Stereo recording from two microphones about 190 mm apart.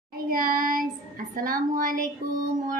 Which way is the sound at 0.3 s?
50° right (ahead or behind).